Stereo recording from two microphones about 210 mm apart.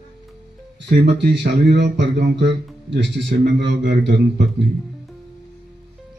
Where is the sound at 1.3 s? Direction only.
55° right (ahead or behind).